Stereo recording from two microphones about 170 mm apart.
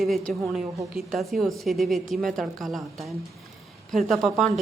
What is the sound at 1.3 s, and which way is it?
A woman's voice, centre (ahead or behind).